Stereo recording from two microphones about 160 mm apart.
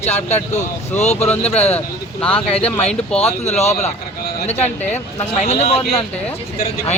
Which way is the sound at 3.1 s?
40° left (ahead or behind).